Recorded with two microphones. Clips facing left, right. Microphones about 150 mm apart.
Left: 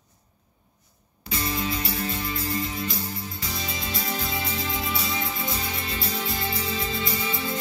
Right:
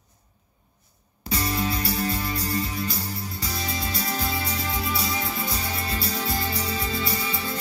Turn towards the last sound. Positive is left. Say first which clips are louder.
# even
turn(degrees=-35)  # may be behind; listen again after turning